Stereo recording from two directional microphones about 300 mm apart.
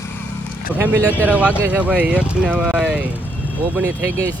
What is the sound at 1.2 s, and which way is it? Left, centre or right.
Speech, centre.